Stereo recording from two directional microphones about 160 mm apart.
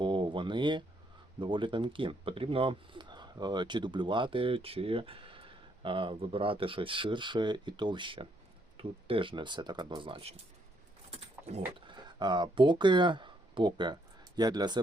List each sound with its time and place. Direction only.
0.0 s a sound: 30° right (ahead or behind)
1.4 s speech: 30° right (ahead or behind)
11.1 s vehicle: 40° right (ahead or behind)
11.9 s speech: 30° right (ahead or behind)